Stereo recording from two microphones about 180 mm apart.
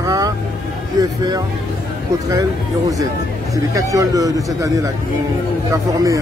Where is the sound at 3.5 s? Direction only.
20° right (ahead or behind).